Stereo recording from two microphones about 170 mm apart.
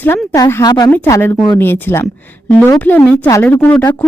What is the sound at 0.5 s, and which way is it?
A woman's voice, 25° left (ahead or behind).